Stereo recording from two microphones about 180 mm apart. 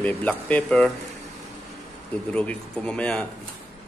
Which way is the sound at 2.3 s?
5° left (ahead or behind).